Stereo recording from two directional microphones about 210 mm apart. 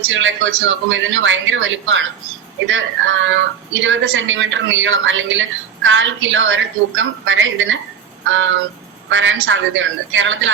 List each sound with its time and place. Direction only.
0.1 s speech: 65° right (ahead or behind)
8.2 s a sound: 65° right (ahead or behind)
9.0 s speech: 65° right (ahead or behind)